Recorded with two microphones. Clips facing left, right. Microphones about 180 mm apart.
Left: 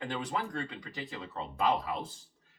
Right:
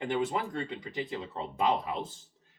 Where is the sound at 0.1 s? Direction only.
25° right (ahead or behind).